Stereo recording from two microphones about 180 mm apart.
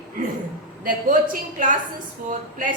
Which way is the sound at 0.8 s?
50° right (ahead or behind).